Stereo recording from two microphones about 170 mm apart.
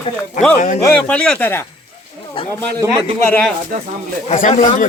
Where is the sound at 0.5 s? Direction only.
50° left (ahead or behind).